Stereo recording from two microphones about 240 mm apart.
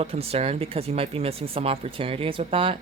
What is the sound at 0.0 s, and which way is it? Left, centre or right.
Speech, right.